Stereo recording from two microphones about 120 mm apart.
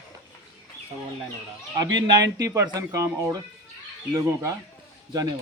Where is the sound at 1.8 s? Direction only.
35° right (ahead or behind).